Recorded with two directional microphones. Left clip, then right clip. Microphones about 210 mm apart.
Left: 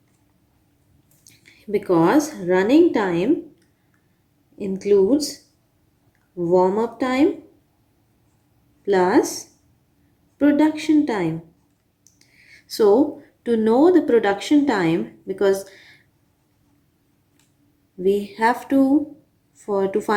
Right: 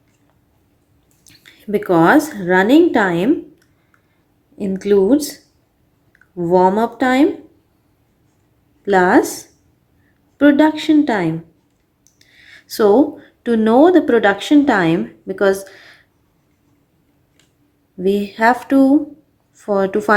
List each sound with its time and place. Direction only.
1.5 s a woman's voice: 40° right (ahead or behind)
4.5 s a woman's voice: 40° right (ahead or behind)
8.8 s a woman's voice: 35° right (ahead or behind)
18.0 s a woman's voice: 35° right (ahead or behind)